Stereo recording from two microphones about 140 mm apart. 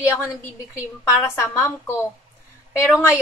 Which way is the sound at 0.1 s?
20° left (ahead or behind).